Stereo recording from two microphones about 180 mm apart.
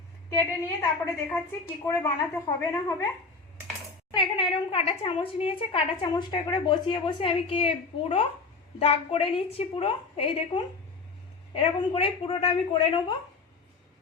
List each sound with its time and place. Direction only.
0.3 s speech: 15° left (ahead or behind)
1.8 s speech: 15° left (ahead or behind)
4.1 s a woman's voice: 30° left (ahead or behind)